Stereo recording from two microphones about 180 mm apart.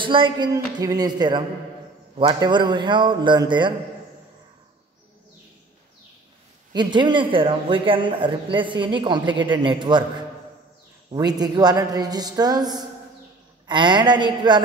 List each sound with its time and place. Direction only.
0.0 s a man's voice: 30° right (ahead or behind)
6.7 s a man's voice: 25° right (ahead or behind)
11.1 s a man's voice: 20° right (ahead or behind)